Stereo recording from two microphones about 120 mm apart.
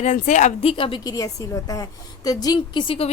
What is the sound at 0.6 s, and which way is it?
Speech, 50° left (ahead or behind).